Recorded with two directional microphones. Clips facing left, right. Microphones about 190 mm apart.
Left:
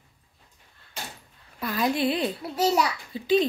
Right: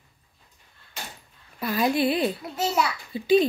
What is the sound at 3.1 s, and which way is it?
Speech, 10° right (ahead or behind).